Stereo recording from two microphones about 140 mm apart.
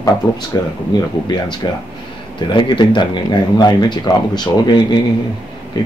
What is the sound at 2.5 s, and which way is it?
Speech, 35° left (ahead or behind).